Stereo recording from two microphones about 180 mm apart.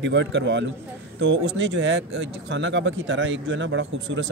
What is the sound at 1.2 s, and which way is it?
Speech, 90° right.